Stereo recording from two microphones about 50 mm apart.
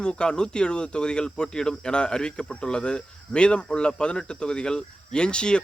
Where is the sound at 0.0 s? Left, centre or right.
Centre.